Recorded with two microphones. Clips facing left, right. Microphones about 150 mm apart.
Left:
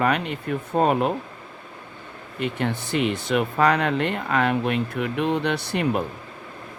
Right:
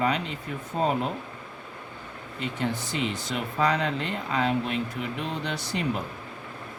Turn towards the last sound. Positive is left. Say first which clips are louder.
# left 6 dB
turn(degrees=60)  # may be behind; listen again after turning